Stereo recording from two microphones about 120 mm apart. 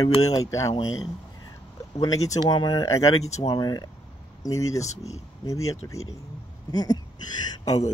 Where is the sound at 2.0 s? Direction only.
30° left (ahead or behind).